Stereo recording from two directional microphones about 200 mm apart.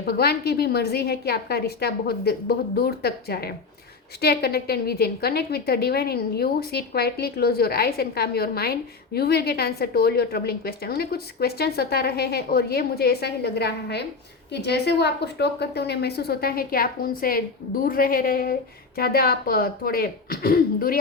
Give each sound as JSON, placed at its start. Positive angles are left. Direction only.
{"t": 0.0, "sound": "a woman's voice", "side_deg": 50}